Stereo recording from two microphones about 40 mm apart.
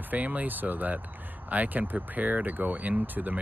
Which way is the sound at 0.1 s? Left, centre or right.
Right.